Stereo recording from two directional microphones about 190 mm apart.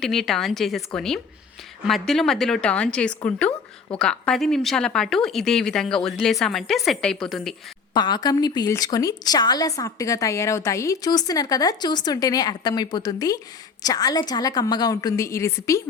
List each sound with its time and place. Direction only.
0.0 s a woman's voice: centre (ahead or behind)
7.9 s a woman's voice: 20° left (ahead or behind)